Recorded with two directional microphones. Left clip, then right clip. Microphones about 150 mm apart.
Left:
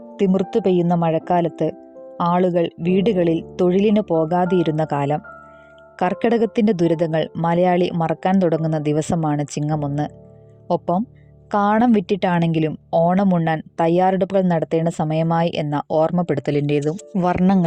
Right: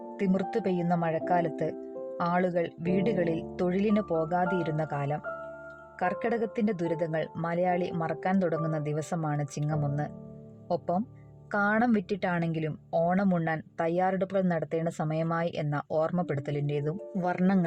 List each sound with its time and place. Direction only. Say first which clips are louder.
0.2 s a woman's voice: left 11 dB; 50° left (ahead or behind); by 5.2 s 70° left (ahead or behind)
6.0 s a woman's voice: left 10 dB; 60° left (ahead or behind)